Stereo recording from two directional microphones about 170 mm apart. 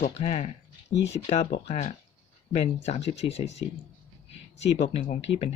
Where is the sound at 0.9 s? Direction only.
90° left.